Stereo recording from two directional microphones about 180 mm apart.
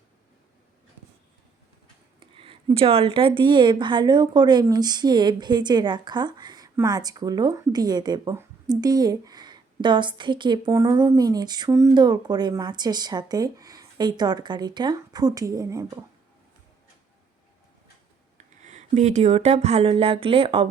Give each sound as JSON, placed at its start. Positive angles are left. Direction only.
{"t": 2.3, "sound": "speech", "side_deg": -30}
{"t": 18.3, "sound": "speech", "side_deg": -40}